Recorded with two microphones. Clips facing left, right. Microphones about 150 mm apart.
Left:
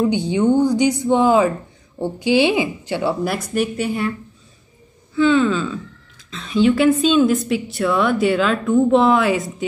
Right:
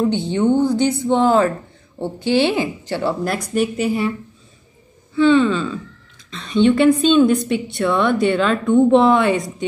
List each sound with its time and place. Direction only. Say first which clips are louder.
0.0 s speech: even; 10° left (ahead or behind)
5.1 s a woman's voice: right 2 dB; centre (ahead or behind)